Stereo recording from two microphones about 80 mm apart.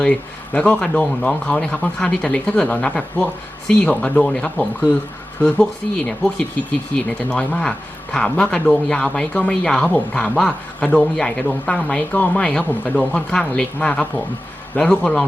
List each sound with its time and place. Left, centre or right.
0.0 s speech: centre
9.9 s speech: centre